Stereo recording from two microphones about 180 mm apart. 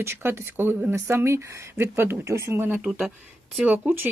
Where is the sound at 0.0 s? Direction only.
15° right (ahead or behind).